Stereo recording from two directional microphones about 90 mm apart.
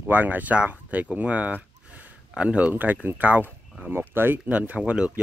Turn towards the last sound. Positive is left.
turn(degrees=-15)  # may be behind; listen again after turning